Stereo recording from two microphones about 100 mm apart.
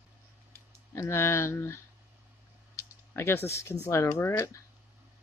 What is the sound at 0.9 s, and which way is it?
Speech, 30° left (ahead or behind).